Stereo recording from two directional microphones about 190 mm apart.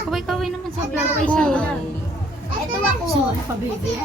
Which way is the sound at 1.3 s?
5° left (ahead or behind).